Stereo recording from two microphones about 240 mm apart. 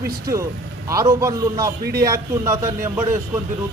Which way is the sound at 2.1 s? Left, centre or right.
Centre.